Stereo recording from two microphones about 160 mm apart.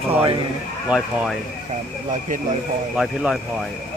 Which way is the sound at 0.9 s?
5° right (ahead or behind).